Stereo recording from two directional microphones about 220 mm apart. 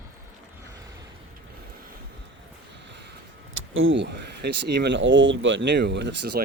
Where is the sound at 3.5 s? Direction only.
65° right (ahead or behind).